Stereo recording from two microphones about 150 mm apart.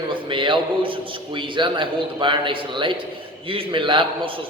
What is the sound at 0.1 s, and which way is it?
A man's voice, 35° right (ahead or behind).